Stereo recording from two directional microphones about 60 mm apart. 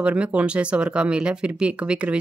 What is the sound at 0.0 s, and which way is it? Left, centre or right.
Speech, right.